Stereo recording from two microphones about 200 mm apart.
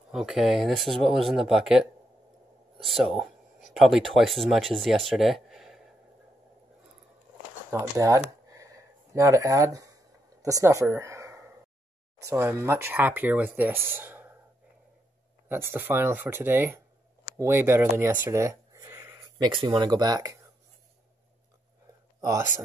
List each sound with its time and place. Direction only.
0.1 s speech: centre (ahead or behind)
7.7 s speech: 15° right (ahead or behind)
8.5 s a sound: 15° right (ahead or behind)
10.4 s speech: 15° right (ahead or behind)
15.4 s speech: 10° right (ahead or behind)
22.2 s speech: 15° right (ahead or behind)